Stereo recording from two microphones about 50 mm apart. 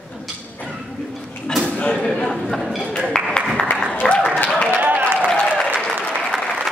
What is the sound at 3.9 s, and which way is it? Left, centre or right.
Applause, left.